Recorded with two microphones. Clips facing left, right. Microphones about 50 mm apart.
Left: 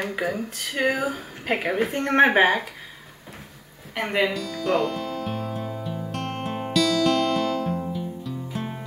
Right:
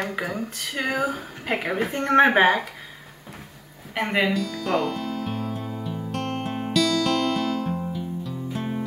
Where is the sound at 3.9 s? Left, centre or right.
Centre.